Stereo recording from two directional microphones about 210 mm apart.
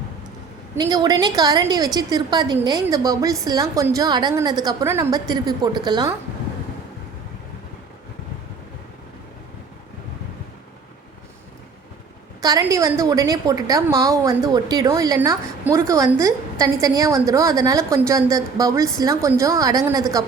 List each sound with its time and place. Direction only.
0.8 s a woman's voice: 20° right (ahead or behind)
12.4 s a woman's voice: 15° right (ahead or behind)